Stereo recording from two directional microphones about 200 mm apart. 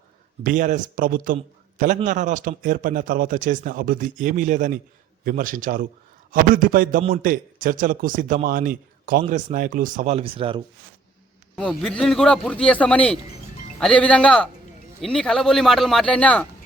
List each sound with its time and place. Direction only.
0.4 s speech: 40° right (ahead or behind)
11.5 s speech: centre (ahead or behind)